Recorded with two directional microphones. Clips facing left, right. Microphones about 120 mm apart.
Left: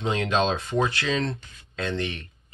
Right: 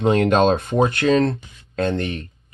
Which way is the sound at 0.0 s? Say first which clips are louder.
Right 8 dB; 55° right (ahead or behind).